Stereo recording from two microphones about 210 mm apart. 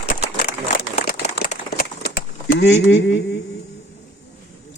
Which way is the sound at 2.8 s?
60° left (ahead or behind).